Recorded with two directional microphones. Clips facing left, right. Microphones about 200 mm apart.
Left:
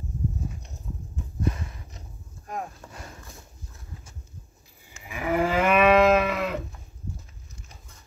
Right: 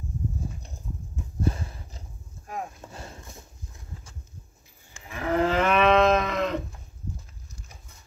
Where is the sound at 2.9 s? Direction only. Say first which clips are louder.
Right 2 dB; 30° right (ahead or behind).